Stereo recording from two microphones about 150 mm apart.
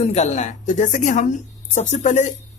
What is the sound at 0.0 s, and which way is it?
Speech, 45° left (ahead or behind).